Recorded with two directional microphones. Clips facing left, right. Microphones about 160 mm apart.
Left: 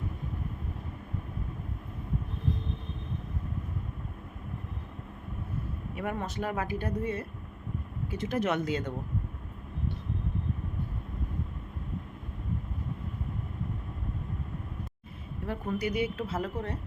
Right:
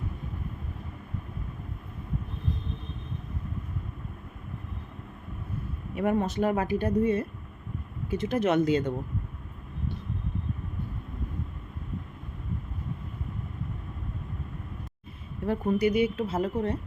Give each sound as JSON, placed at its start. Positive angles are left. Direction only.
{"t": 6.0, "sound": "a woman's voice", "side_deg": -25}
{"t": 15.4, "sound": "a woman's voice", "side_deg": -25}